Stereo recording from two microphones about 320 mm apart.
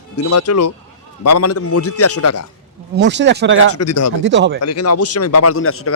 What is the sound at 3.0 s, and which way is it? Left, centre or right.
Speech, right.